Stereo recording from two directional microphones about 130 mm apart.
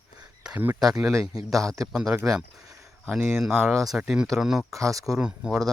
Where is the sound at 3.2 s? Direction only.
15° right (ahead or behind).